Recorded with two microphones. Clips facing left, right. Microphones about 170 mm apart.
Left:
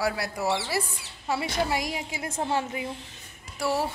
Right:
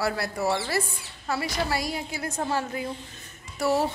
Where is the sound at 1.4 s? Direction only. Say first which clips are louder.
Even; 20° left (ahead or behind).